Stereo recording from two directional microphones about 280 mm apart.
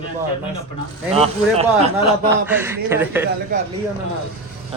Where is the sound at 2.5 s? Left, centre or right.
Centre.